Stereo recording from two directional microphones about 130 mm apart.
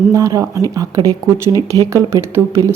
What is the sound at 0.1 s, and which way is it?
Speech, 25° right (ahead or behind).